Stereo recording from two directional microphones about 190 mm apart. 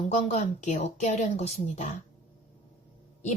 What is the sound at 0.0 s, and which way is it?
Speech, 35° left (ahead or behind).